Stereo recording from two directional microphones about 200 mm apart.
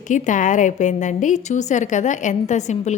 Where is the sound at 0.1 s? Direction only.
40° left (ahead or behind).